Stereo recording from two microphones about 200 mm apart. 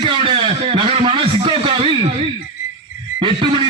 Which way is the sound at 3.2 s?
25° right (ahead or behind).